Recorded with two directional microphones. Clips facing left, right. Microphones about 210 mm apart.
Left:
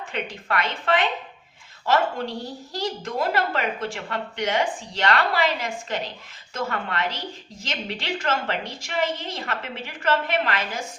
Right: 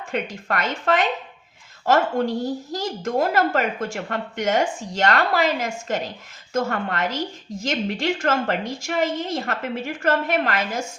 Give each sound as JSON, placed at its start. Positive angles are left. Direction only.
{"t": 0.1, "sound": "a woman's voice", "side_deg": -45}